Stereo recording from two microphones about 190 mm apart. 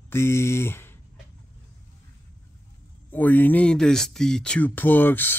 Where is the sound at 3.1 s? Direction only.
10° left (ahead or behind).